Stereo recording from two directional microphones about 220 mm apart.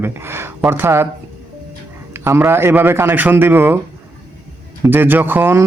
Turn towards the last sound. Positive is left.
turn(degrees=-10)  # may be behind; listen again after turning